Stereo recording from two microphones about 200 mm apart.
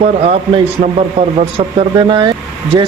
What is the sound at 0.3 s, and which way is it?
Speech, 30° right (ahead or behind).